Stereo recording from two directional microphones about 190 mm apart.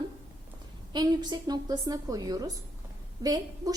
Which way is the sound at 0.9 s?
20° right (ahead or behind).